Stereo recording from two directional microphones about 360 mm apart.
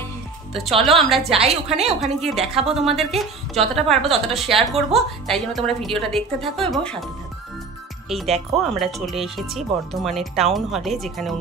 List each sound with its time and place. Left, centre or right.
0.8 s speech: centre
1.2 s a woman's voice: centre
1.9 s speech: centre
2.3 s a woman's voice: centre
3.0 s speech: centre
8.1 s speech: centre